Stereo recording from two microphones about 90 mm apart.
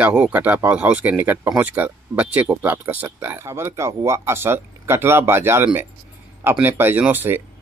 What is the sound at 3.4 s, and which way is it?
Speech, 30° right (ahead or behind).